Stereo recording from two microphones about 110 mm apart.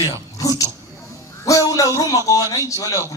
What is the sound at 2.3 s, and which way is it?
Speech, 30° left (ahead or behind).